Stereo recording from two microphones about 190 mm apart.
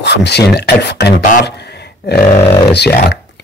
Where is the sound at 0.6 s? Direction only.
60° left (ahead or behind).